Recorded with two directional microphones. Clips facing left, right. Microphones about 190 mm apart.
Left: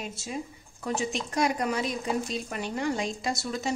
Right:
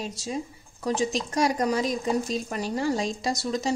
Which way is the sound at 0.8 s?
35° right (ahead or behind).